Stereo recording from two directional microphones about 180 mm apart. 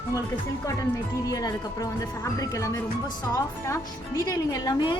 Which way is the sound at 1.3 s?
20° left (ahead or behind).